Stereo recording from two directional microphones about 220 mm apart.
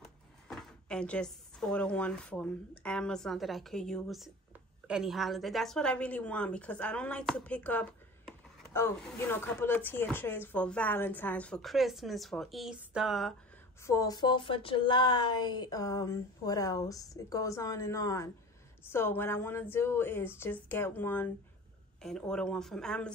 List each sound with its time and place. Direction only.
0.0 s a woman's voice: centre (ahead or behind)
13.8 s speech: 15° left (ahead or behind)
22.3 s a woman's voice: 5° left (ahead or behind)